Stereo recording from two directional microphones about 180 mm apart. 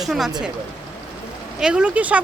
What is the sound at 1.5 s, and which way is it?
Speech, 5° right (ahead or behind).